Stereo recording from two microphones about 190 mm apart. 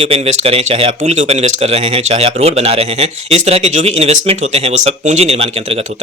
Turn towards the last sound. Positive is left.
turn(degrees=-30)  # may be behind; listen again after turning